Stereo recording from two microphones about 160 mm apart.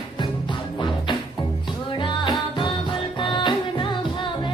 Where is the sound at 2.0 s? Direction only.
30° left (ahead or behind).